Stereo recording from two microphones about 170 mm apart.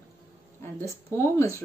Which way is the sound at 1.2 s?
15° left (ahead or behind).